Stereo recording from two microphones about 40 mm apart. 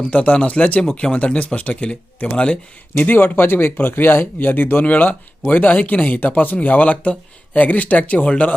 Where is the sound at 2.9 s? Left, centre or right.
Left.